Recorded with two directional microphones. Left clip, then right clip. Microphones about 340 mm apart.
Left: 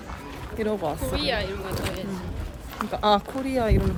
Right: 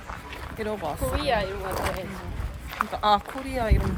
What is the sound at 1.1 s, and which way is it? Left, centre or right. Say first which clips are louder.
Speech: right 4 dB; centre.